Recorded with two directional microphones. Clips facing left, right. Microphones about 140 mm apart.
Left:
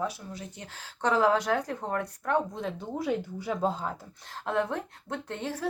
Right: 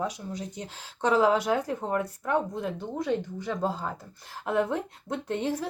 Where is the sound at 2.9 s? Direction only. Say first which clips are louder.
Right 1 dB; 10° left (ahead or behind).